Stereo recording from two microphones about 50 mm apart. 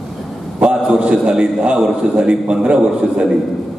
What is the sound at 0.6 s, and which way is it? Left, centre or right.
A man's voice, centre.